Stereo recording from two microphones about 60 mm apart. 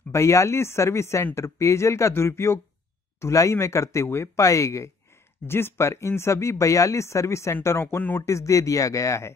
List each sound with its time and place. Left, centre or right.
0.1 s speech: left
5.5 s speech: left